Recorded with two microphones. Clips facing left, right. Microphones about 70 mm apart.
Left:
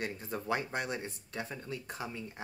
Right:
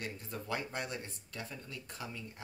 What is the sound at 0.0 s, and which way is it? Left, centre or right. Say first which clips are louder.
Speech: left 5 dB; left.